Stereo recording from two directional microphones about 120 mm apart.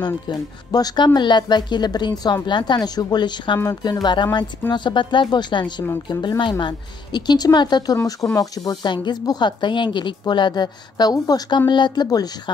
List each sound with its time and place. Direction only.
0.0 s speech: 35° left (ahead or behind)
3.5 s speech: 30° left (ahead or behind)